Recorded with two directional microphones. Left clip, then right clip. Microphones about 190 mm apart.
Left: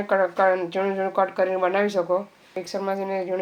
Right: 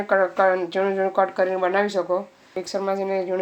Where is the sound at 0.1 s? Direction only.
5° right (ahead or behind).